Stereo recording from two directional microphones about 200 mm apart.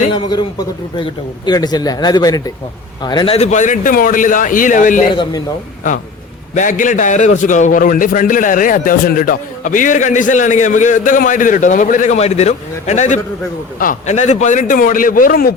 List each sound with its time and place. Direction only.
0.1 s a man's voice: 20° left (ahead or behind)
1.5 s a man's voice: 20° left (ahead or behind); by 5.0 s 40° left (ahead or behind)
5.1 s a man's voice: 20° left (ahead or behind)
6.5 s a man's voice: 40° left (ahead or behind)